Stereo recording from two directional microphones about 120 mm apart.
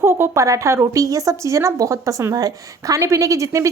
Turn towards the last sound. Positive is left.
turn(degrees=-25)  # may be behind; listen again after turning